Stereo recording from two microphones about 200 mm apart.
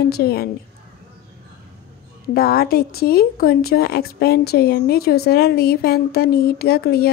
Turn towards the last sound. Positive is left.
turn(degrees=50)  # may be behind; listen again after turning